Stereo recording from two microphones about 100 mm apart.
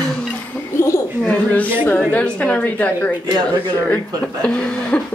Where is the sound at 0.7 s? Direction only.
30° left (ahead or behind).